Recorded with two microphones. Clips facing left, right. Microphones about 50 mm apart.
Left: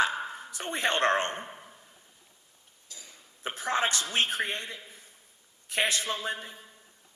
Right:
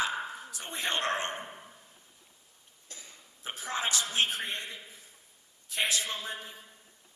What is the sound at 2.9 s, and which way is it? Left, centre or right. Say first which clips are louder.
Burping: even; right.